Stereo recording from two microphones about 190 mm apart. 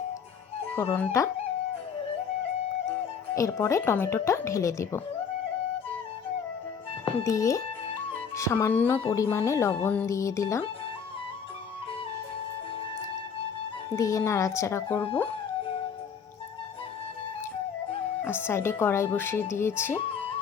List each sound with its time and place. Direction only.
0.7 s speech: 10° left (ahead or behind)
3.3 s speech: 15° left (ahead or behind)
7.3 s speech: 15° left (ahead or behind)
13.9 s speech: 15° left (ahead or behind)
18.3 s speech: 10° left (ahead or behind)